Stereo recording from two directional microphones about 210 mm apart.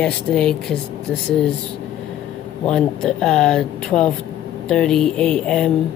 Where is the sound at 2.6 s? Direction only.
5° left (ahead or behind).